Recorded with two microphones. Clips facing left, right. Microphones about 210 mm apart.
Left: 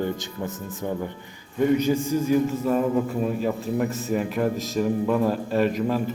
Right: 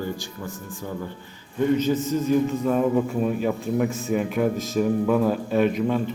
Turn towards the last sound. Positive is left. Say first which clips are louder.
# right 1 dB
turn(degrees=0)  # may be behind; listen again after turning